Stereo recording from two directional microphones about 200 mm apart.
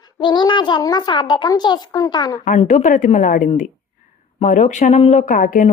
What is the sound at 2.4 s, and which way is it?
Speech, 40° left (ahead or behind).